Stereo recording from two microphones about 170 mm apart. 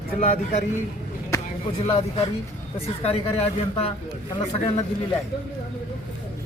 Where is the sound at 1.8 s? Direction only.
35° left (ahead or behind).